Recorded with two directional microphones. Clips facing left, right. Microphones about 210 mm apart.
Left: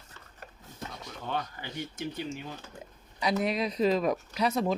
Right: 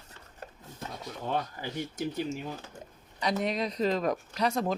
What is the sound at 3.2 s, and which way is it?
Speech, 5° left (ahead or behind).